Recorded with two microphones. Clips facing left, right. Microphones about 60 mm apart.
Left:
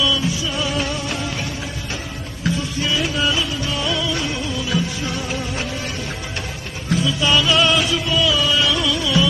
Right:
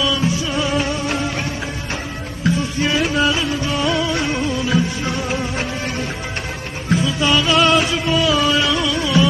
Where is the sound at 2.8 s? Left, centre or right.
Right.